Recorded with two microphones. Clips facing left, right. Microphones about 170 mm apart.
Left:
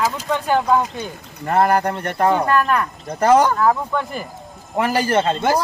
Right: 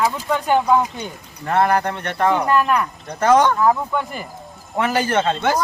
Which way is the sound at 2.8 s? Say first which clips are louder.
Left 1 dB; 5° left (ahead or behind).